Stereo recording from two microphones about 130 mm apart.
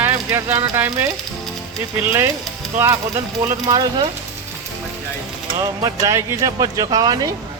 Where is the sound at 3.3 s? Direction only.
30° right (ahead or behind).